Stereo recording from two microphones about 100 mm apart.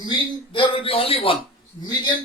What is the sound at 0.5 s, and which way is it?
Speech, 60° left (ahead or behind).